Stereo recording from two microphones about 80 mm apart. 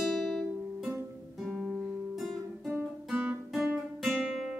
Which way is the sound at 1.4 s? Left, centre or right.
Centre.